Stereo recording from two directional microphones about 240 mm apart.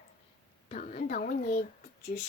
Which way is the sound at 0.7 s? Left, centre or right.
Left.